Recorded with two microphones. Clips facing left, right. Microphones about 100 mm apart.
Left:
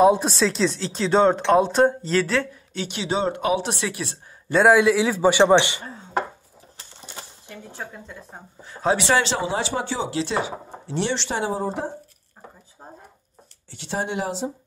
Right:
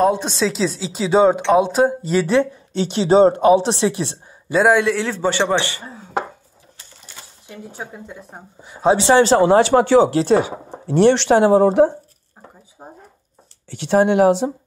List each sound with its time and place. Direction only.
0.0 s speech: 5° left (ahead or behind); by 4.2 s 25° right (ahead or behind)
4.5 s a man's voice: centre (ahead or behind)
5.5 s speech: 20° left (ahead or behind)
7.4 s speech: 15° right (ahead or behind)
8.9 s speech: 30° right (ahead or behind)
9.4 s speech: 60° right (ahead or behind); by 11.9 s 75° right (ahead or behind)
12.8 s a sound: 15° right (ahead or behind)
13.7 s speech: 65° right (ahead or behind)